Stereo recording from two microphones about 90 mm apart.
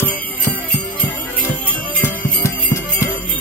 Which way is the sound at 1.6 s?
20° left (ahead or behind).